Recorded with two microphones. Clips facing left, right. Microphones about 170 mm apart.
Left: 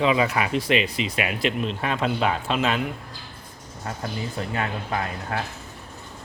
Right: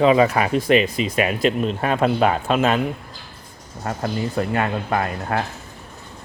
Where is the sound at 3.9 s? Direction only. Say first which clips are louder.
Right 6 dB; 60° right (ahead or behind).